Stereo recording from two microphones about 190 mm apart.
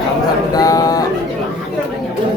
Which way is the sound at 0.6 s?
20° left (ahead or behind).